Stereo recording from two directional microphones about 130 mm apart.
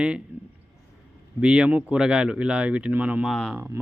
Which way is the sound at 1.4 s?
5° right (ahead or behind).